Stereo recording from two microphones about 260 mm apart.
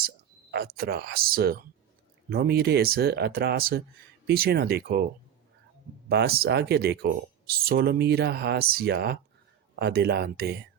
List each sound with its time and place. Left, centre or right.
0.5 s speech: right
6.1 s speech: right